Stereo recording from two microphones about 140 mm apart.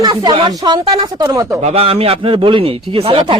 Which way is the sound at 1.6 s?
45° right (ahead or behind).